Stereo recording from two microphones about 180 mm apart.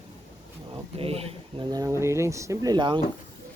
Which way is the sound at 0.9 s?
35° right (ahead or behind).